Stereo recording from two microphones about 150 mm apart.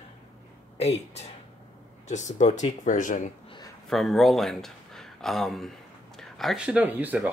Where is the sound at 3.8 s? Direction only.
Centre (ahead or behind).